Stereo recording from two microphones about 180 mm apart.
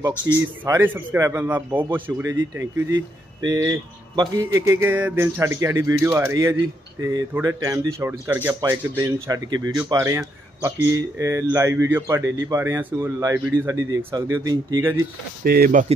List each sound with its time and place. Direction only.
0.4 s speech: 15° right (ahead or behind)
3.4 s speech: 15° right (ahead or behind)
15.4 s speech: 60° right (ahead or behind)